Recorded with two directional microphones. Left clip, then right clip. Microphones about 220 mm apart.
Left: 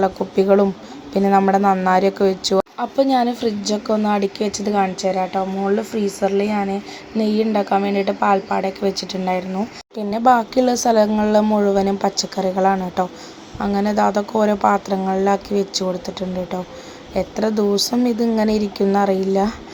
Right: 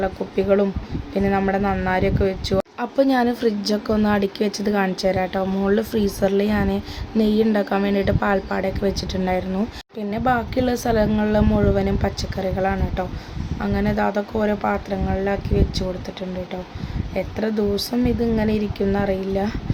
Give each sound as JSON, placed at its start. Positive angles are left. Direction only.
{"t": 0.0, "sound": "a woman's voice", "side_deg": 15}
{"t": 2.7, "sound": "speech", "side_deg": 0}
{"t": 5.3, "sound": "speech", "side_deg": -10}
{"t": 6.2, "sound": "speech", "side_deg": 0}
{"t": 10.1, "sound": "a woman's voice", "side_deg": 15}